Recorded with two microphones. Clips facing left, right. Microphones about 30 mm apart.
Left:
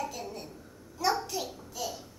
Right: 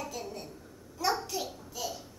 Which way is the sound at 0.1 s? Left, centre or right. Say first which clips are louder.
Even; centre.